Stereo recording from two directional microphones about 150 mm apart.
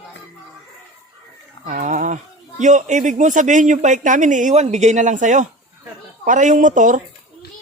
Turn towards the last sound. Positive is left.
turn(degrees=-60)  # may be behind; listen again after turning